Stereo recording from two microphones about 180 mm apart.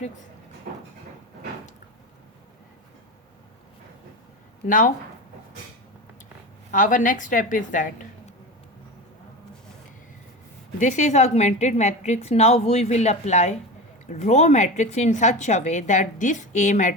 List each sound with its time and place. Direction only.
4.6 s a woman's voice: 45° left (ahead or behind)
6.7 s a woman's voice: 45° left (ahead or behind)
10.8 s a woman's voice: 45° left (ahead or behind)